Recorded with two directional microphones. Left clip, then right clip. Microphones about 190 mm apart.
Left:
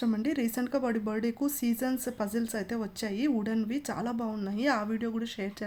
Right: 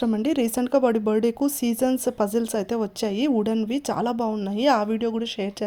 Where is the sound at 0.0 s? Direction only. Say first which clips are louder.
Right 8 dB; 30° right (ahead or behind).